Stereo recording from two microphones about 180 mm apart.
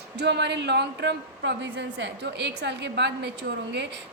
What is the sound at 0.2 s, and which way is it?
A woman's voice, 70° right (ahead or behind).